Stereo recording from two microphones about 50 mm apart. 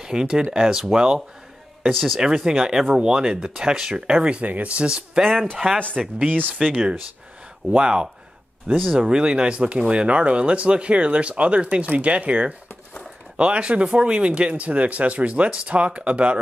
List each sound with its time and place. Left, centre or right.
0.0 s speech: centre
5.6 s speech: right
6.6 s speech: centre